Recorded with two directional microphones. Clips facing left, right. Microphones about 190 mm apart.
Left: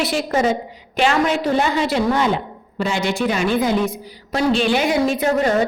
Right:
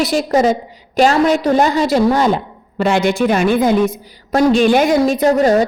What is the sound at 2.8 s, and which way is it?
A woman's voice, 60° right (ahead or behind).